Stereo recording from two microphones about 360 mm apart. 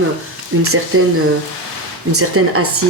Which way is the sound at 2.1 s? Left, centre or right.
Right.